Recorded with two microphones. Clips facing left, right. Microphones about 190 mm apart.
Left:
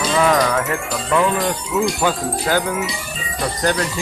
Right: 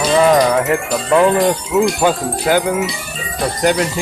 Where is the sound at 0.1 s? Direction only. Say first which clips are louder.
Right 5 dB; 30° right (ahead or behind).